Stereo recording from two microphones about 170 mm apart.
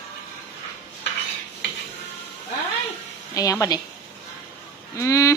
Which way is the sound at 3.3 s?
20° left (ahead or behind).